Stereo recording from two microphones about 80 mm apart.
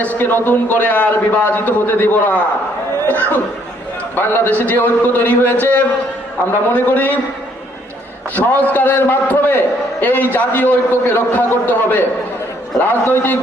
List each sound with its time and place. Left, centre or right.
0.0 s a man's voice: left
8.4 s a man's voice: left